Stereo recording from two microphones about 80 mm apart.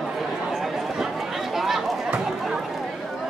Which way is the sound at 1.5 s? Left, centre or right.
Centre.